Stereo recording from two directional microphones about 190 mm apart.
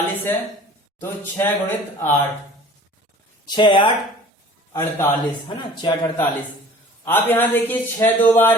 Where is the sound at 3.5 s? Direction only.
25° left (ahead or behind).